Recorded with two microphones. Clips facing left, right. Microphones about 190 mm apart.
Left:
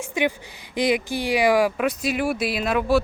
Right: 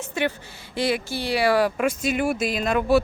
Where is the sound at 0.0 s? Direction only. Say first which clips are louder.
Left 2 dB; 15° left (ahead or behind).